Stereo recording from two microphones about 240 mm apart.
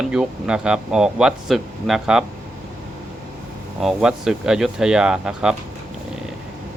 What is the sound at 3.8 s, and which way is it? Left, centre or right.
Speech, centre.